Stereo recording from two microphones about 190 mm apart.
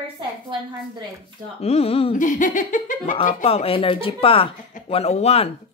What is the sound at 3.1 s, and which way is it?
Speech, 30° left (ahead or behind).